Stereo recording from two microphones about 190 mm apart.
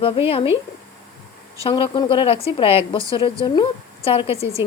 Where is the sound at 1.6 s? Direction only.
30° left (ahead or behind).